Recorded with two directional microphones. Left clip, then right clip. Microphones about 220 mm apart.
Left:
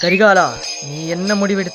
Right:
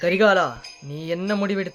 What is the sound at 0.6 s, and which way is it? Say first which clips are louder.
Jingle bell: left 15 dB; 45° left (ahead or behind).